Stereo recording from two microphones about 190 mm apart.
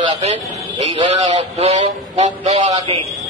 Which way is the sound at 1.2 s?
30° right (ahead or behind).